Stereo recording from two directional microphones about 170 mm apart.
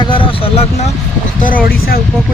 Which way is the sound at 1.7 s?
60° left (ahead or behind).